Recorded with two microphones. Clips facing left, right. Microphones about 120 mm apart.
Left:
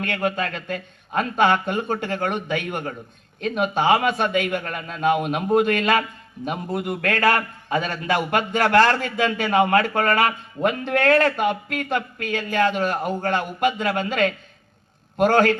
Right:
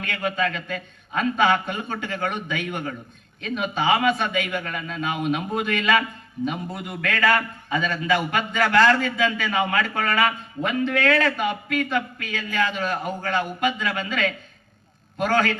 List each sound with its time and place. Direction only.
0.0 s a man's voice: 55° left (ahead or behind)